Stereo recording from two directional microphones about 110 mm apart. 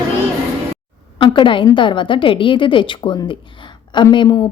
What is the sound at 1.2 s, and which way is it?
A woman's voice, 50° left (ahead or behind).